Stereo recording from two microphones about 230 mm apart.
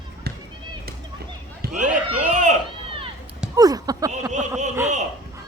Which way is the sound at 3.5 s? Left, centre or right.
Centre.